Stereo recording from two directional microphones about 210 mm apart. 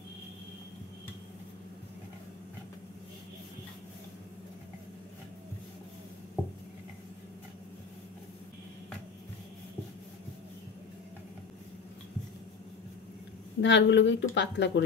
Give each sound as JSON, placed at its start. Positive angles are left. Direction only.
{"t": 13.6, "sound": "speech", "side_deg": 55}